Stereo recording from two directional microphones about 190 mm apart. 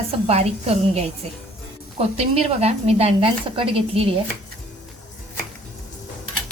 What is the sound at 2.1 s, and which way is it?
A woman's voice, 30° right (ahead or behind).